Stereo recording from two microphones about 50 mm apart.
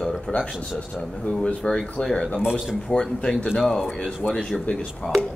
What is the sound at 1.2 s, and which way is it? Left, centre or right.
Speech, left.